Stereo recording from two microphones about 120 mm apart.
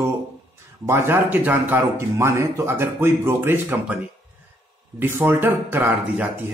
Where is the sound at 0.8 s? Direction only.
20° right (ahead or behind).